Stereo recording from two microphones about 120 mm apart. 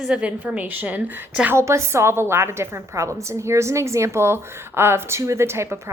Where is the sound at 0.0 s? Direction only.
10° right (ahead or behind).